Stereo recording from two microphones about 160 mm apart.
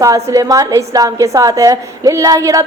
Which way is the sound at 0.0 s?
20° right (ahead or behind).